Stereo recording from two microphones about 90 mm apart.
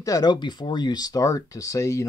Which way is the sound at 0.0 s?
40° left (ahead or behind).